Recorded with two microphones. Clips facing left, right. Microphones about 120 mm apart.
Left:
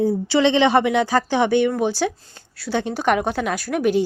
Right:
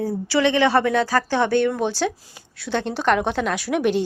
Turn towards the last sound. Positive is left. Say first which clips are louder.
# left 1 dB
turn(degrees=5)  # may be behind; listen again after turning